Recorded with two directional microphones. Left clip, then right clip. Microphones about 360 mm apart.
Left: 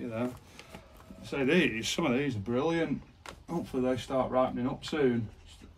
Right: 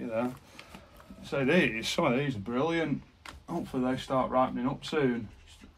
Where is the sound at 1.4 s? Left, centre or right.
Centre.